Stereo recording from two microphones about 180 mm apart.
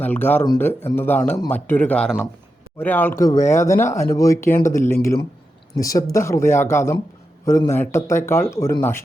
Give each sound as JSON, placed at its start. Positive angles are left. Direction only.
{"t": 0.0, "sound": "speech", "side_deg": 10}
{"t": 5.7, "sound": "speech", "side_deg": 20}